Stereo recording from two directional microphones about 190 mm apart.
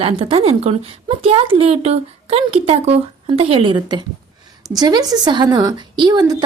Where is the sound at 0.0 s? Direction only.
30° right (ahead or behind).